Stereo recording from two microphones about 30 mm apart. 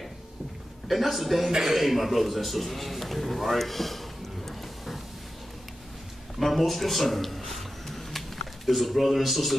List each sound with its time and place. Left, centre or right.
0.8 s a man's voice: centre
1.5 s speech: centre
1.8 s a man's voice: centre
4.5 s a sound: centre
6.4 s a sound: centre
8.6 s a man's voice: centre